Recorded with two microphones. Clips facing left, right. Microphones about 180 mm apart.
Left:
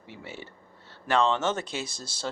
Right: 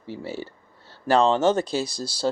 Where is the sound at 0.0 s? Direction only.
35° right (ahead or behind).